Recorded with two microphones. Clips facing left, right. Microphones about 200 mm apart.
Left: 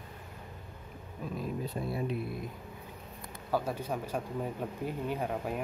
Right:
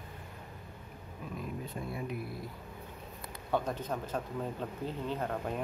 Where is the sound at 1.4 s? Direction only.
35° left (ahead or behind).